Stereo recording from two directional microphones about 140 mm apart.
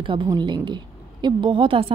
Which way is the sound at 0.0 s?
35° right (ahead or behind).